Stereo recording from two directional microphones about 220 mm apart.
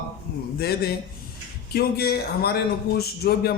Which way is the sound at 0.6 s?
45° left (ahead or behind).